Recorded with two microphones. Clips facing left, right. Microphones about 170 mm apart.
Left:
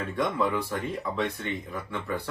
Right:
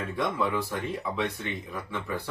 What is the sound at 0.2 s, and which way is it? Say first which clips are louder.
Speech: left 1 dB; centre (ahead or behind).